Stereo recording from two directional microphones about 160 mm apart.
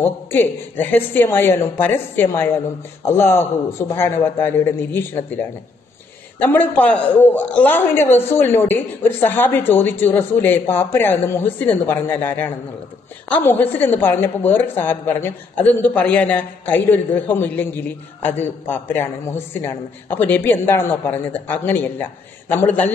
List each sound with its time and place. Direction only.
0.0 s a woman's voice: 15° left (ahead or behind)
6.4 s a woman's voice: 10° left (ahead or behind)